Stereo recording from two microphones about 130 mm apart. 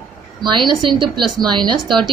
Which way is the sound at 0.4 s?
35° right (ahead or behind).